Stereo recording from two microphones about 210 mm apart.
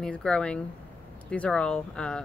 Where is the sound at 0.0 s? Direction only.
5° left (ahead or behind).